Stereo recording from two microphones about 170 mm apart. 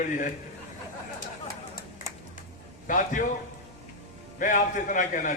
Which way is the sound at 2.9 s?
50° left (ahead or behind).